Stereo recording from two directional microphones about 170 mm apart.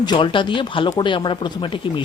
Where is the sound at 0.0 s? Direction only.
25° left (ahead or behind).